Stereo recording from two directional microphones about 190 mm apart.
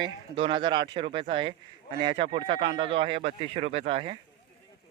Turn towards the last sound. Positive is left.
turn(degrees=-30)  # may be behind; listen again after turning